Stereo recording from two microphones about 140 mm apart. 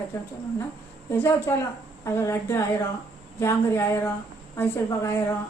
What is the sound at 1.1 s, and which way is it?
A woman's voice, 15° left (ahead or behind).